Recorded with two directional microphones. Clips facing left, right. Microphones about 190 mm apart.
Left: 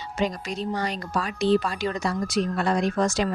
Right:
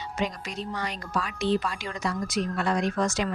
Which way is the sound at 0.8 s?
35° left (ahead or behind).